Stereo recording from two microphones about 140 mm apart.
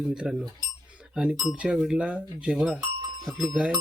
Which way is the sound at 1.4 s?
5° right (ahead or behind).